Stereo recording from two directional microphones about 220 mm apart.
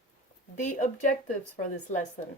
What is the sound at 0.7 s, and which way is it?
Speech, 35° left (ahead or behind).